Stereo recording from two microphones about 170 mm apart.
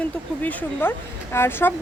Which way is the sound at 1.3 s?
15° left (ahead or behind).